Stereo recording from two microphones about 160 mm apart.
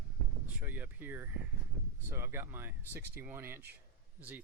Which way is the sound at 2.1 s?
15° right (ahead or behind).